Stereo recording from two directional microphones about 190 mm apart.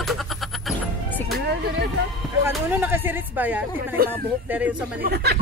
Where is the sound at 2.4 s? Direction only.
10° right (ahead or behind).